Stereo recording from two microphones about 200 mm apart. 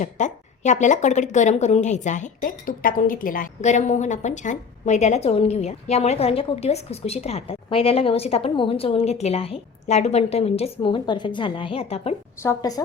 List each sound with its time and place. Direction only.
0.0 s speech: 35° left (ahead or behind)
12.4 s speech: 15° left (ahead or behind)